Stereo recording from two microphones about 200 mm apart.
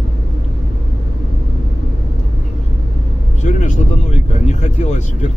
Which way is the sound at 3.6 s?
35° left (ahead or behind).